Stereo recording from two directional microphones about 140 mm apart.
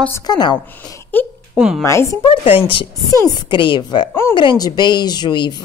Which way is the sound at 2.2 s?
40° left (ahead or behind).